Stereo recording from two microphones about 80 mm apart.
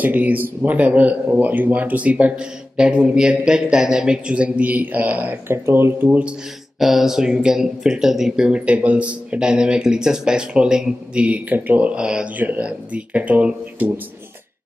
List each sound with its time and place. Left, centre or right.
0.0 s speech: right
6.0 s speech: centre
6.8 s speech: centre